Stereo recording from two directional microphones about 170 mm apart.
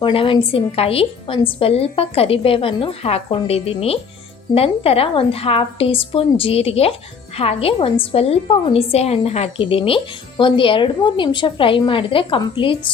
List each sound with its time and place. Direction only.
0.0 s speech: 30° left (ahead or behind)